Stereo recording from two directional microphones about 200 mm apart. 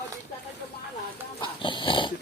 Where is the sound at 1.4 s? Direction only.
25° left (ahead or behind).